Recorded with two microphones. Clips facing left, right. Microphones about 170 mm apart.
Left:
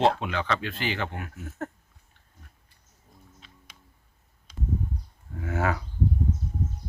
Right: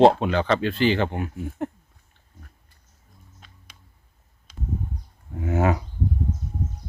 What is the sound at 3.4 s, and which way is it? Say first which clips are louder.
Music: left 1 dB; 45° right (ahead or behind).